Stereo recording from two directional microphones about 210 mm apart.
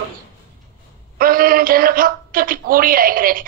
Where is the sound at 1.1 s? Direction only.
45° right (ahead or behind).